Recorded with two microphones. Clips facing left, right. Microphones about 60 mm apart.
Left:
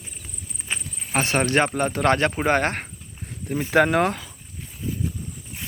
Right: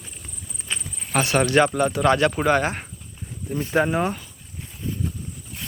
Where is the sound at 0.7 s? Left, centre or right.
Centre.